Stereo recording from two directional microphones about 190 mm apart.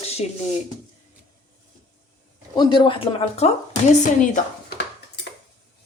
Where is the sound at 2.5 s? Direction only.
25° left (ahead or behind).